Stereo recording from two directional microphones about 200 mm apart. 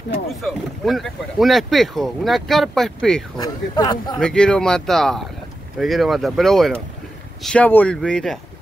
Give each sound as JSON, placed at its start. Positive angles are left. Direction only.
{"t": 0.3, "sound": "speech", "side_deg": 0}
{"t": 3.3, "sound": "speech", "side_deg": 20}
{"t": 4.2, "sound": "speech", "side_deg": 5}